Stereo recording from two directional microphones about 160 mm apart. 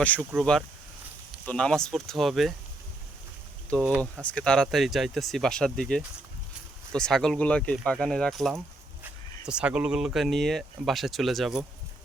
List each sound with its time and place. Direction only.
0.2 s speech: 10° right (ahead or behind)
1.5 s speech: 5° left (ahead or behind)
3.7 s speech: 5° left (ahead or behind)